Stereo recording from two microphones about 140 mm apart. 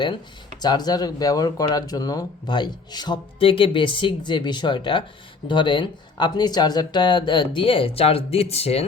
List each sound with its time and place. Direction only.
0.6 s speech: 30° left (ahead or behind); by 8.8 s 45° left (ahead or behind)